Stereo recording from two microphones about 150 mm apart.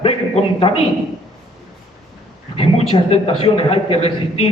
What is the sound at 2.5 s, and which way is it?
A man's voice, 40° left (ahead or behind).